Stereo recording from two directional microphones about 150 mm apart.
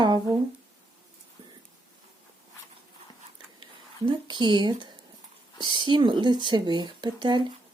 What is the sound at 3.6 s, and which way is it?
Speech, 30° right (ahead or behind).